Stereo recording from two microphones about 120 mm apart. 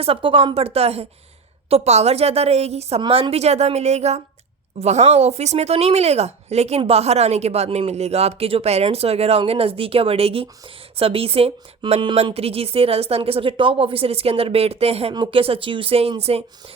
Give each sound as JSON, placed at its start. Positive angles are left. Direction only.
{"t": 0.0, "sound": "speech", "side_deg": -50}
{"t": 3.0, "sound": "speech", "side_deg": -50}
{"t": 15.1, "sound": "speech", "side_deg": -35}
{"t": 15.4, "sound": "speech", "side_deg": -50}